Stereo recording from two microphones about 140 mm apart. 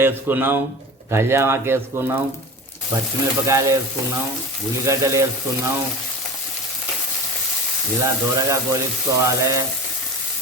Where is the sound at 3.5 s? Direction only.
25° right (ahead or behind).